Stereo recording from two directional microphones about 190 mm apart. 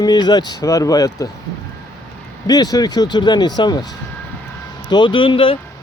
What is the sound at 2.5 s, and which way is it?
Speech, 20° left (ahead or behind).